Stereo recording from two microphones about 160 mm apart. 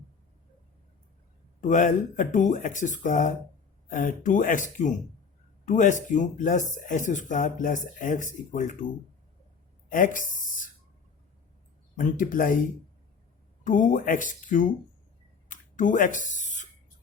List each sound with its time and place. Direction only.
1.6 s speech: 50° left (ahead or behind)
9.9 s speech: 55° left (ahead or behind)
10.3 s beatboxing: 55° left (ahead or behind)
11.9 s speech: 55° left (ahead or behind)
13.7 s speech: 55° left (ahead or behind)
15.4 s a sound: 55° left (ahead or behind)